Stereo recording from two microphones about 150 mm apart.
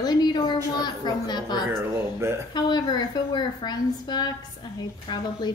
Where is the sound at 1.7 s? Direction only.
15° right (ahead or behind).